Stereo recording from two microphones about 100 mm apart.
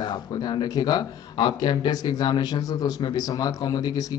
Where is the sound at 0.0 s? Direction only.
45° left (ahead or behind).